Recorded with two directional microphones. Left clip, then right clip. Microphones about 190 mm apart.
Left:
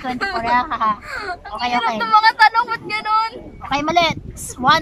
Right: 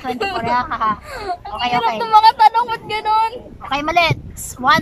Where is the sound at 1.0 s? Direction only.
15° right (ahead or behind).